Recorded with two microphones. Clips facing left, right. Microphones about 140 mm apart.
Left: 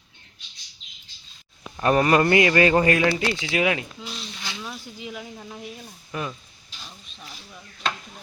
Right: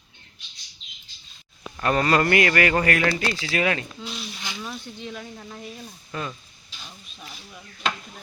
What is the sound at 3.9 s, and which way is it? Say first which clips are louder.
Speech: right 2 dB; centre (ahead or behind).